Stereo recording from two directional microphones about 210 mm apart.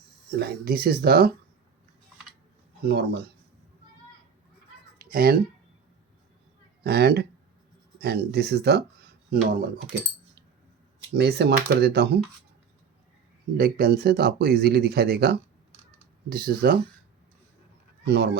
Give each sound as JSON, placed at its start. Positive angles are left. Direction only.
{"t": 0.3, "sound": "speech", "side_deg": -50}
{"t": 2.8, "sound": "speech", "side_deg": -50}
{"t": 4.9, "sound": "a sound", "side_deg": -45}
{"t": 6.8, "sound": "speech", "side_deg": -50}
{"t": 11.1, "sound": "speech", "side_deg": -50}
{"t": 13.6, "sound": "speech", "side_deg": -45}
{"t": 18.0, "sound": "speech", "side_deg": -50}